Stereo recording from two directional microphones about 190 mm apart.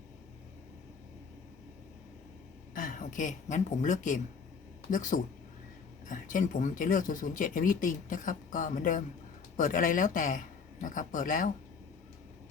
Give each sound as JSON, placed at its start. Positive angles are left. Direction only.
{"t": 2.7, "sound": "speech", "side_deg": 45}